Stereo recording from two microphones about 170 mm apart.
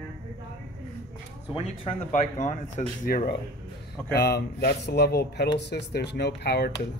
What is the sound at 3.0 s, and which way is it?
Speech, 60° left (ahead or behind).